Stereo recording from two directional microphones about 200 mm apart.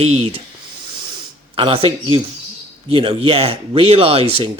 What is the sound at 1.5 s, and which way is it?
Speech, 25° right (ahead or behind).